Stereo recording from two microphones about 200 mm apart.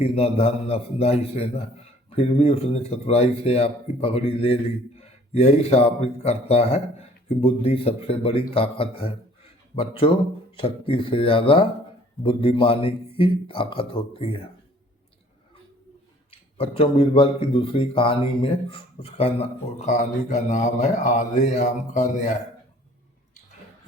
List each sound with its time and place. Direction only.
0.0 s speech: 30° left (ahead or behind)
9.4 s a sound: 30° left (ahead or behind)
10.6 s a man's voice: 25° left (ahead or behind)
16.3 s speech: 25° left (ahead or behind)